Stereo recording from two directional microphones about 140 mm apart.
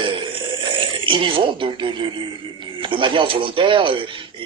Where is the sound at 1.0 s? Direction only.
35° right (ahead or behind).